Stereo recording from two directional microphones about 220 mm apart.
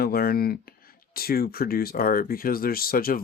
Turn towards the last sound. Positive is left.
turn(degrees=40)  # may be behind; listen again after turning